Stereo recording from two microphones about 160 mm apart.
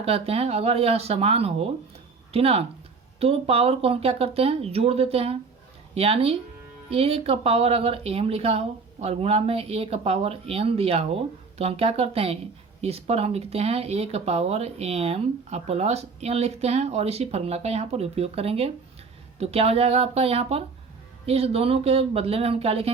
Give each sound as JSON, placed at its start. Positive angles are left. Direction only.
{"t": 0.0, "sound": "speech", "side_deg": -40}